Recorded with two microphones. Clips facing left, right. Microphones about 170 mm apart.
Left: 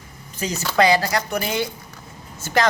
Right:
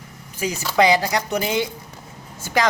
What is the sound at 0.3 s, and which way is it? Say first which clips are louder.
Speech: right 1 dB; 10° right (ahead or behind).